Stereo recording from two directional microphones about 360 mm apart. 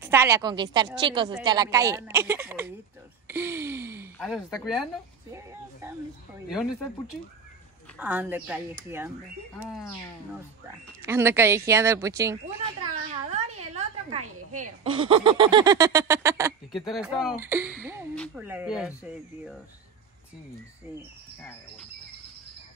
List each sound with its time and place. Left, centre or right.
0.0 s a sound: centre
5.3 s speech: centre
8.0 s speech: centre
11.0 s a sound: centre
16.9 s speech: centre
21.4 s speech: centre